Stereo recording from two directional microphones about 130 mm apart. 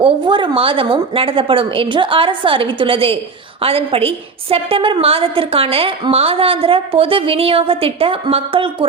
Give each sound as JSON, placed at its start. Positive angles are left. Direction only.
{"t": 0.0, "sound": "a woman's voice", "side_deg": -40}